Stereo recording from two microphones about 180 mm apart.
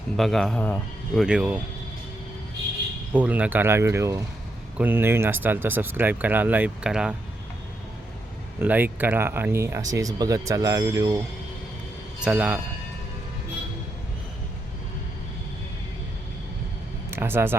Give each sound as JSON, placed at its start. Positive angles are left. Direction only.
{"t": 0.2, "sound": "speech", "side_deg": 0}
{"t": 1.2, "sound": "speech", "side_deg": -5}
{"t": 3.1, "sound": "speech", "side_deg": -10}
{"t": 8.5, "sound": "speech", "side_deg": -10}
{"t": 12.2, "sound": "speech", "side_deg": -10}
{"t": 17.1, "sound": "a sound", "side_deg": -10}